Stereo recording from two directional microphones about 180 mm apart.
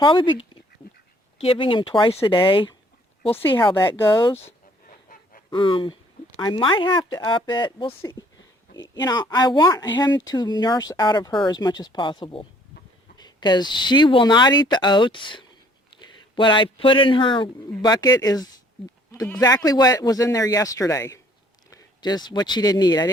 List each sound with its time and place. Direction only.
0.0 s speech: 25° left (ahead or behind)
3.8 s speech: 15° left (ahead or behind)
4.9 s goose: 50° left (ahead or behind)
5.5 s speech: 25° left (ahead or behind)
19.6 s speech: 20° left (ahead or behind)